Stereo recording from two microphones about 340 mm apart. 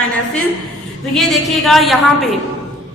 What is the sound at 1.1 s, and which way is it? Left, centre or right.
Speech, centre.